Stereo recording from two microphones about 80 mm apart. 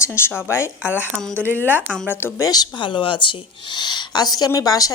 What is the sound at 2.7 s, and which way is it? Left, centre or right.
Speech, left.